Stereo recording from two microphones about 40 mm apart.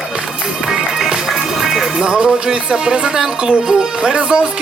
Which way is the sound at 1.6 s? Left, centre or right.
Centre.